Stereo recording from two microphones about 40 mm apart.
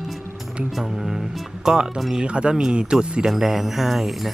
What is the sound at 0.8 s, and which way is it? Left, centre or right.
Speech, centre.